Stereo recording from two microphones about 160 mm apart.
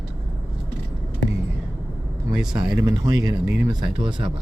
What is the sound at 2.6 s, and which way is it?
Speech, 25° right (ahead or behind).